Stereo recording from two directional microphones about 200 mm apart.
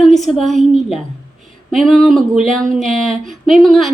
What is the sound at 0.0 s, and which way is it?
A woman's voice, centre (ahead or behind).